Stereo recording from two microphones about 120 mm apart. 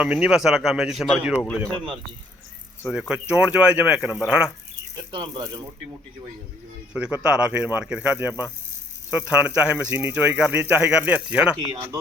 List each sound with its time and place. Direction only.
0.0 s speech: 10° right (ahead or behind)
3.1 s speech: 10° right (ahead or behind)
4.9 s speech: 35° right (ahead or behind)
6.9 s speech: 10° right (ahead or behind)